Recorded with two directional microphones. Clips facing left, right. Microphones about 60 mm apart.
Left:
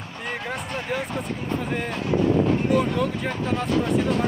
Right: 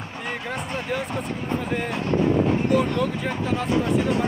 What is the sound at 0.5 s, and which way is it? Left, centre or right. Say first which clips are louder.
Speech: right 1 dB; centre.